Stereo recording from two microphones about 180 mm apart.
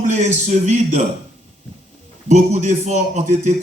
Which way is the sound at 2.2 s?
40° right (ahead or behind).